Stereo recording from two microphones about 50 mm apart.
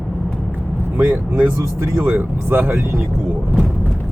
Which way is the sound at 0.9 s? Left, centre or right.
Right.